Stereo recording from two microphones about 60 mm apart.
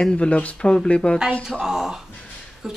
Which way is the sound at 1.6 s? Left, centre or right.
Centre.